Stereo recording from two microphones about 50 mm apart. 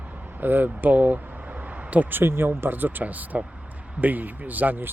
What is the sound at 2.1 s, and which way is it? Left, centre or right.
Speech, right.